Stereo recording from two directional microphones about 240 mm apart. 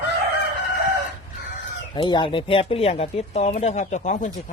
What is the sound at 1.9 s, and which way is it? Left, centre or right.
Speech, centre.